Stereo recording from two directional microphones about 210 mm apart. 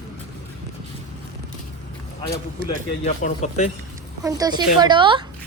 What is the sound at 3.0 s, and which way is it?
Speech, 30° left (ahead or behind).